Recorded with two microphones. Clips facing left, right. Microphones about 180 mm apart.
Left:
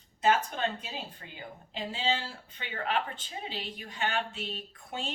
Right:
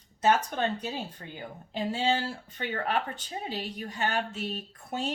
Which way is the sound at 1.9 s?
45° right (ahead or behind).